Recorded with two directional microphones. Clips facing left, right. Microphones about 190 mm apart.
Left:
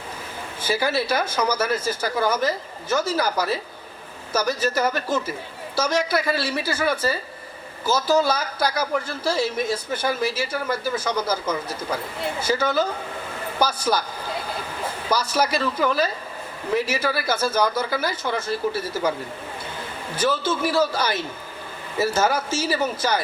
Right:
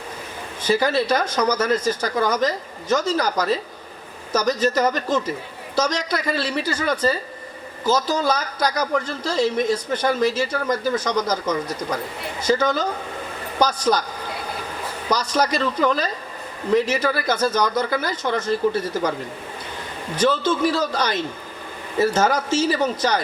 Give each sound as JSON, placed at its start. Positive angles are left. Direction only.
{"t": 0.6, "sound": "speech", "side_deg": 10}
{"t": 15.1, "sound": "speech", "side_deg": 10}
{"t": 20.1, "sound": "speech", "side_deg": 10}